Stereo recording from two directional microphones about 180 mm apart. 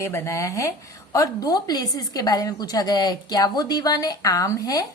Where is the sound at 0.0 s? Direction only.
15° left (ahead or behind).